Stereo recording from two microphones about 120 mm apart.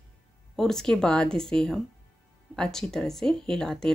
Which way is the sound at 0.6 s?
5° left (ahead or behind).